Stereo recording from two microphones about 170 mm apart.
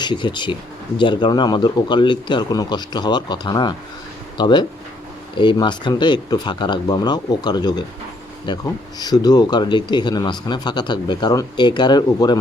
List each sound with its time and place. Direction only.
0.0 s speech: 25° left (ahead or behind)